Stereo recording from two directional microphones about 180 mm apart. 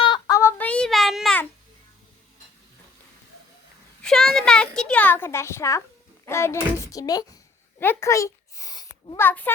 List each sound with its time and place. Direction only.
0.0 s child singing: 20° left (ahead or behind); by 1.5 s 5° left (ahead or behind)
4.0 s a sound: centre (ahead or behind)
6.2 s a child's voice: 15° left (ahead or behind)